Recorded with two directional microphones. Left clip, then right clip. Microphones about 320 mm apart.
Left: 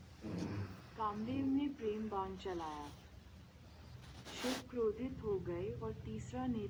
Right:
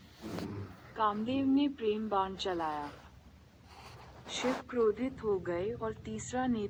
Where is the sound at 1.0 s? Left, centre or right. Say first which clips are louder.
Right 9 dB; right.